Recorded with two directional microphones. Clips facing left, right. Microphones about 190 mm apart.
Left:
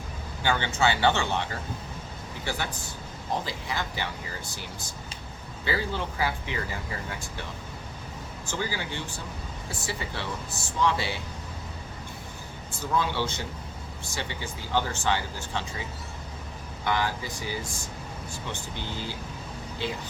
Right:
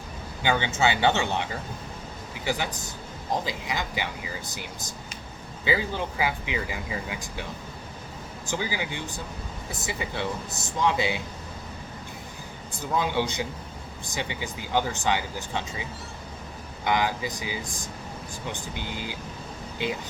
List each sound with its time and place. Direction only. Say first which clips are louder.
0.4 s speech: right 1 dB; 20° right (ahead or behind)
2.4 s speech: right 4 dB; 15° right (ahead or behind)
8.4 s speech: right 2 dB; 15° right (ahead or behind)
12.7 s speech: right 2 dB; 15° right (ahead or behind)
16.8 s speech: right 3 dB; 15° right (ahead or behind)